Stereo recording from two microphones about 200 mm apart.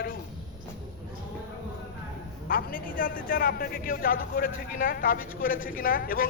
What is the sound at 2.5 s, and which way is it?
A man's voice, 45° left (ahead or behind).